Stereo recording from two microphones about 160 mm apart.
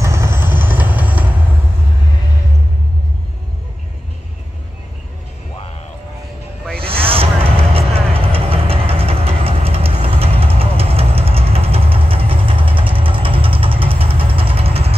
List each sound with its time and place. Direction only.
0.0 s vehicle: 15° right (ahead or behind)
6.8 s a sound: 35° right (ahead or behind)
7.5 s music: 35° right (ahead or behind)